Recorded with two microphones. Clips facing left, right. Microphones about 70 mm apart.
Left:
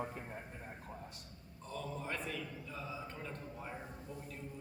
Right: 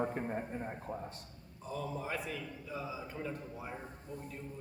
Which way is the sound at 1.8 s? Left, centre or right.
Centre.